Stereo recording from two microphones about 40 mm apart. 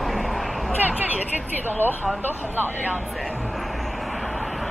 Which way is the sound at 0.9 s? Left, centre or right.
Right.